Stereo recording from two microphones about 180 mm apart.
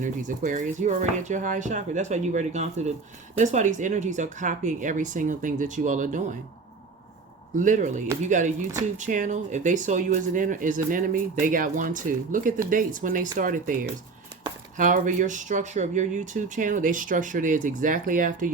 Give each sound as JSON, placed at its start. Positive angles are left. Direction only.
{"t": 0.0, "sound": "speech", "side_deg": -45}
{"t": 7.5, "sound": "speech", "side_deg": -45}